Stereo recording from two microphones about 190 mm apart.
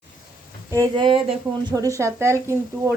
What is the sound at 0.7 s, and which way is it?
A woman's voice, 15° right (ahead or behind).